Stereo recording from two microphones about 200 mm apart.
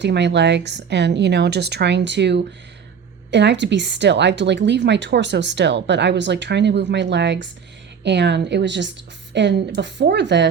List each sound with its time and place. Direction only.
0.0 s a woman's voice: 60° right (ahead or behind)